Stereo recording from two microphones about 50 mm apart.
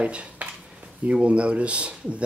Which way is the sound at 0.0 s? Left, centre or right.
Right.